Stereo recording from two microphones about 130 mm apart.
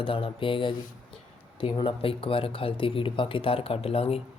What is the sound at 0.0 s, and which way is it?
Speech, 40° left (ahead or behind).